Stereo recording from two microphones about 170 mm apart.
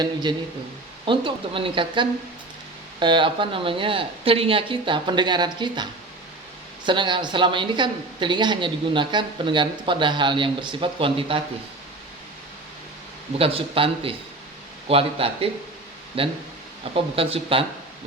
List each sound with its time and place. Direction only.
0.0 s speech: 25° right (ahead or behind)
13.4 s speech: 30° right (ahead or behind)